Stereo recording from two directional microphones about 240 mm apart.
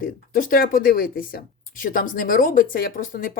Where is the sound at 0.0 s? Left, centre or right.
Left.